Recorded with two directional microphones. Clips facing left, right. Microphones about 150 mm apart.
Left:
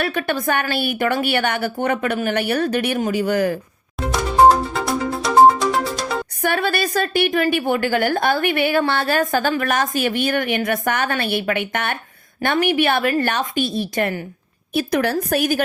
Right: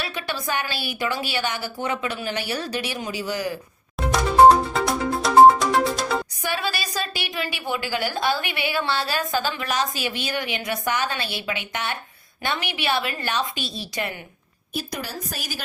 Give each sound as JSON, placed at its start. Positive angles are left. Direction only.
{"t": 0.0, "sound": "a woman's voice", "side_deg": 55}
{"t": 4.1, "sound": "music", "side_deg": 0}
{"t": 6.4, "sound": "a woman's voice", "side_deg": 55}
{"t": 14.7, "sound": "a woman's voice", "side_deg": 65}